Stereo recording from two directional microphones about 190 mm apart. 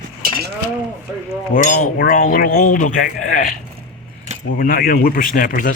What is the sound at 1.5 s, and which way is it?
Speech, 45° left (ahead or behind).